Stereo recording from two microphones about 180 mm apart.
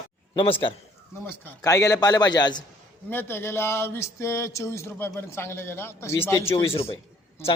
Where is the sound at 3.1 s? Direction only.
10° left (ahead or behind).